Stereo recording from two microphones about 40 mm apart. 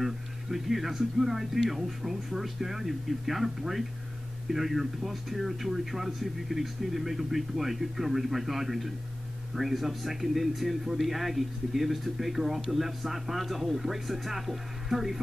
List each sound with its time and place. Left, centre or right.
0.0 s speech: centre